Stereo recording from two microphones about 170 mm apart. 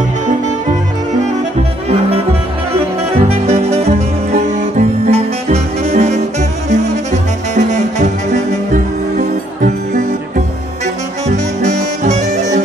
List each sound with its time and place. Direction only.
3.2 s music: 35° right (ahead or behind)
11.2 s saxophone: 40° right (ahead or behind)